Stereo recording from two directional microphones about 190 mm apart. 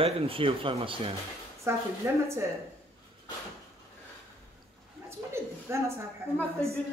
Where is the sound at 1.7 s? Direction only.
15° right (ahead or behind).